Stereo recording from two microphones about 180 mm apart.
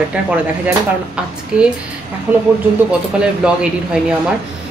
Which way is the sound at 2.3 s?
10° right (ahead or behind).